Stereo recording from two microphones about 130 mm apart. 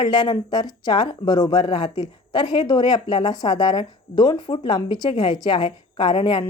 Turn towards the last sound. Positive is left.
turn(degrees=35)  # may be behind; listen again after turning